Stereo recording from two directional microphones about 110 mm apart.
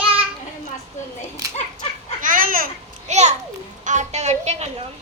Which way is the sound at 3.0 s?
90° right.